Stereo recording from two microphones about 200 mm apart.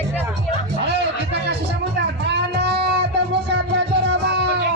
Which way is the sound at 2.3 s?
55° right (ahead or behind).